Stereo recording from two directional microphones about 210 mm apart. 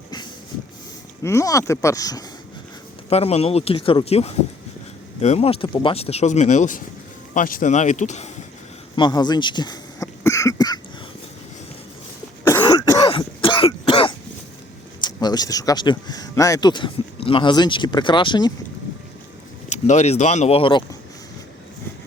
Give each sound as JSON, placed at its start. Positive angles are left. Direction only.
{"t": 1.2, "sound": "speech", "side_deg": 15}
{"t": 3.1, "sound": "speech", "side_deg": 30}
{"t": 9.0, "sound": "cough", "side_deg": 20}
{"t": 12.5, "sound": "cough", "side_deg": 15}
{"t": 13.1, "sound": "throat clearing", "side_deg": 25}
{"t": 15.0, "sound": "speech", "side_deg": 20}
{"t": 19.7, "sound": "speech", "side_deg": 35}